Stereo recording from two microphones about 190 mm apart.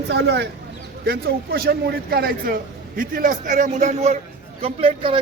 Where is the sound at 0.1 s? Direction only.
65° right (ahead or behind).